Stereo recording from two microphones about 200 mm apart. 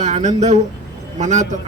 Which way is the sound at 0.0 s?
35° right (ahead or behind).